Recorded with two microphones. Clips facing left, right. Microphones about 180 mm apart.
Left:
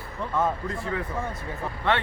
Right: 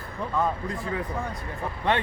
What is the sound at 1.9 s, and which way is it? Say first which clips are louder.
Speech: even; 15° right (ahead or behind).